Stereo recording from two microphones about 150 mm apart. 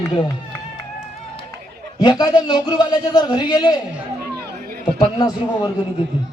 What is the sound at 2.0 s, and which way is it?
Speech, 25° left (ahead or behind).